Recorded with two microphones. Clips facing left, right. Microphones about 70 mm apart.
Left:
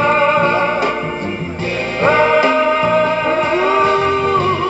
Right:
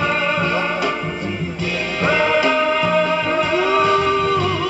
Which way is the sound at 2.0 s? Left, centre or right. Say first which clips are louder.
Left 5 dB; left.